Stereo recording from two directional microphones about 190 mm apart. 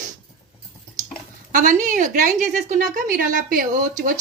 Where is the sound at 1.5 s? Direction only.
45° right (ahead or behind).